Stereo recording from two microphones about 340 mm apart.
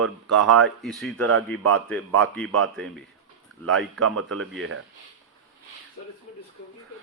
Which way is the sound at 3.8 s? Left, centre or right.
Right.